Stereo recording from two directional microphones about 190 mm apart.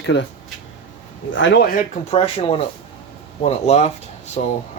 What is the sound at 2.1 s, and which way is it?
Speech, 30° left (ahead or behind).